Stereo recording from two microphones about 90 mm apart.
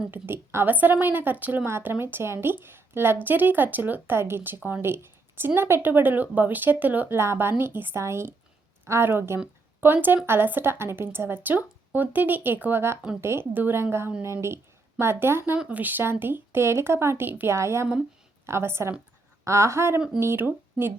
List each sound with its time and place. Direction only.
0.1 s a woman's voice: 25° right (ahead or behind)